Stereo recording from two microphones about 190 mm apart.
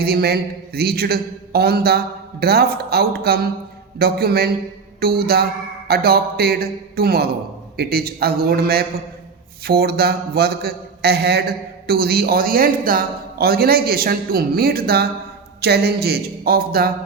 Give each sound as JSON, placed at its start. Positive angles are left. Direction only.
{"t": 0.0, "sound": "a man's voice", "side_deg": -55}